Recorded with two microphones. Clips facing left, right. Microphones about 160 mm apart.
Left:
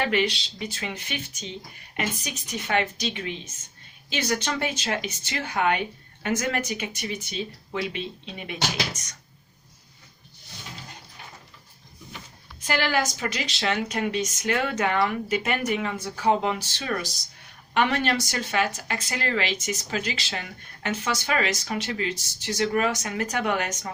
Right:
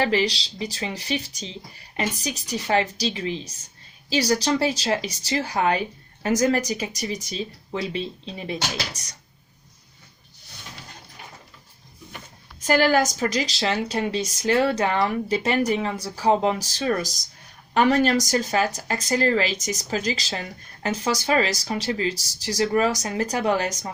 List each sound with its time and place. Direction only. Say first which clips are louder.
0.0 s speech: right 2 dB; 30° right (ahead or behind)
12.5 s speech: right 6 dB; 45° right (ahead or behind)